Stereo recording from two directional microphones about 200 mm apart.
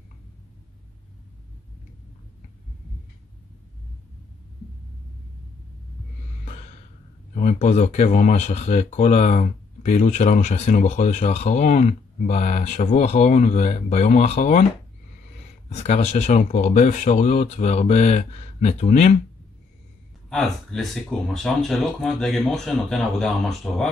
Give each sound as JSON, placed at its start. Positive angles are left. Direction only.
{"t": 7.3, "sound": "speech", "side_deg": 35}
{"t": 15.9, "sound": "speech", "side_deg": 35}
{"t": 20.2, "sound": "speech", "side_deg": 0}